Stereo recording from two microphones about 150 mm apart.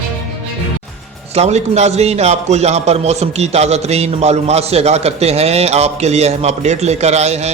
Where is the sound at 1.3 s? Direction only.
45° right (ahead or behind).